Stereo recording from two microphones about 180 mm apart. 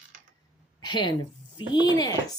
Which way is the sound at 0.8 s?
25° left (ahead or behind).